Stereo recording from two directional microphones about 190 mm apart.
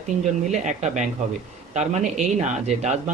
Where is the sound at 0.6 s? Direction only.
40° right (ahead or behind).